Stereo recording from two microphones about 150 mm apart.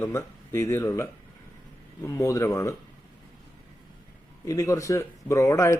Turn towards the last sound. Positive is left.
turn(degrees=20)  # may be behind; listen again after turning